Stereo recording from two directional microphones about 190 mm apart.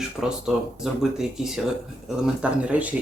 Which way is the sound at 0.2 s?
5° right (ahead or behind).